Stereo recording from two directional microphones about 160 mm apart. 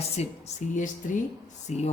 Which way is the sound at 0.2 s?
45° left (ahead or behind).